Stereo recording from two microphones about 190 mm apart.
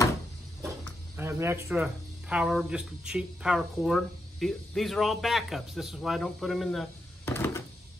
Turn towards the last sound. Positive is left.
turn(degrees=10)  # may be behind; listen again after turning